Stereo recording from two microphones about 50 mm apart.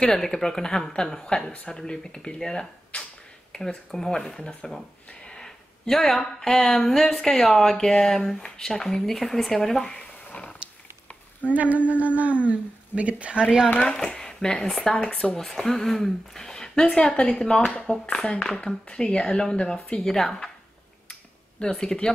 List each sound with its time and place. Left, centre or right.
0.0 s speech: centre
1.4 s speech: left
1.7 s speech: centre
11.5 s speech: right
13.9 s speech: centre
15.3 s speech: centre
21.1 s a sound: centre